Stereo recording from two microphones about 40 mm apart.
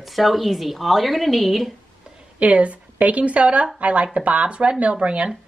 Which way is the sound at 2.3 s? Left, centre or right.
Right.